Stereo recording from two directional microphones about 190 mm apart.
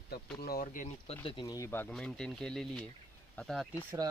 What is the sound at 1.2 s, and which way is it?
Speech, 25° left (ahead or behind).